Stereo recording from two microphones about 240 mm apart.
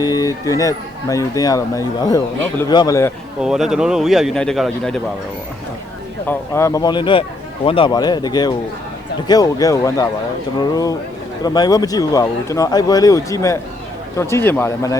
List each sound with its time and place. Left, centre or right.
0.0 s speech: centre
3.4 s speech: centre
6.2 s speech: centre